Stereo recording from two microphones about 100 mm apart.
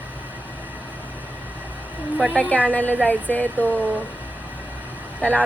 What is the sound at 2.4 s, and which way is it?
Speech, 15° left (ahead or behind).